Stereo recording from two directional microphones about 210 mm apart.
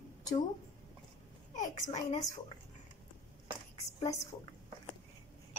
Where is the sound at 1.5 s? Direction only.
35° left (ahead or behind).